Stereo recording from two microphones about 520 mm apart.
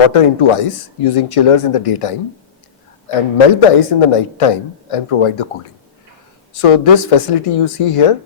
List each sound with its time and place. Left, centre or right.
0.1 s a woman's voice: left
6.5 s a woman's voice: left